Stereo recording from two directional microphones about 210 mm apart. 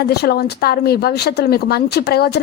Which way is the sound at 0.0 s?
50° left (ahead or behind).